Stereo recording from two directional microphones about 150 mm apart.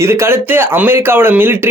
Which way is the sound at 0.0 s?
15° right (ahead or behind).